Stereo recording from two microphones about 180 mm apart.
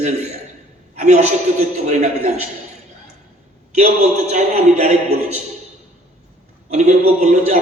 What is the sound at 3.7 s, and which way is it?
A man's voice, 40° right (ahead or behind).